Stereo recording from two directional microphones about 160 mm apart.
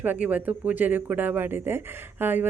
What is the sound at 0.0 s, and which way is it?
A woman's voice, 10° right (ahead or behind).